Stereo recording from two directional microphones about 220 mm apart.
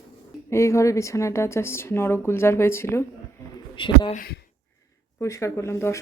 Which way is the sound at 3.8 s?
20° left (ahead or behind).